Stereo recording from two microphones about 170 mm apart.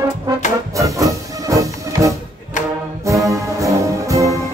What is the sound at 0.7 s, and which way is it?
Music, 20° right (ahead or behind).